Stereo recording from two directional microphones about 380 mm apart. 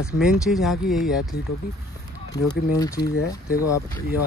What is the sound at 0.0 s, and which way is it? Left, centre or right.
Speech, centre.